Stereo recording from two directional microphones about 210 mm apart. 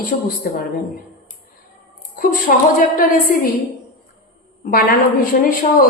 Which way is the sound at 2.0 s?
45° left (ahead or behind).